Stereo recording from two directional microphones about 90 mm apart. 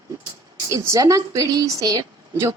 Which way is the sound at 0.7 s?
35° right (ahead or behind).